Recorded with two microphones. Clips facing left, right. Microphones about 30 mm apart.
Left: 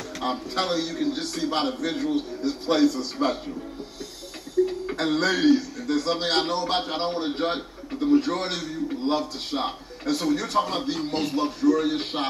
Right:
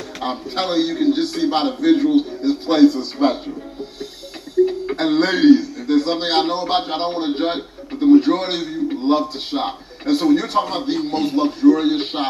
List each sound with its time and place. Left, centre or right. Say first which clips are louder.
0.2 s a man's voice: right 4 dB; right
4.6 s a man's voice: right 6 dB; right
10.6 s a man's voice: right 3 dB; right
11.2 s a man's voice: right 9 dB; right